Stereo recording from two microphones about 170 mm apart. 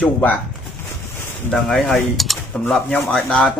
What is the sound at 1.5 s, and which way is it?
Speech, 5° left (ahead or behind).